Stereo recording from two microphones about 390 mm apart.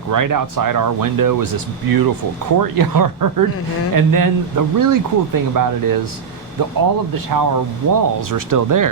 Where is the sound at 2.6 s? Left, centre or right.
Right.